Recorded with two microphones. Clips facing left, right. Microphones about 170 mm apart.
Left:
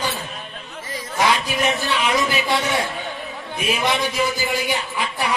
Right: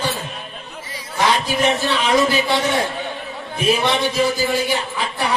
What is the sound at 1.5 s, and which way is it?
A man's voice, 35° right (ahead or behind).